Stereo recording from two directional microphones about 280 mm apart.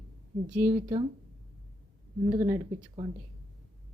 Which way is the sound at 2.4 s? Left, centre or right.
Centre.